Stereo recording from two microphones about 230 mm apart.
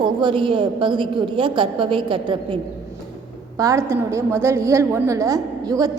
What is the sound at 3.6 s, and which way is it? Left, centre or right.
A woman's voice, centre.